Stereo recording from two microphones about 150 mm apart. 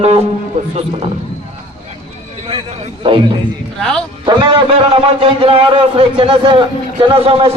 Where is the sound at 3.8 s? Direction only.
5° left (ahead or behind).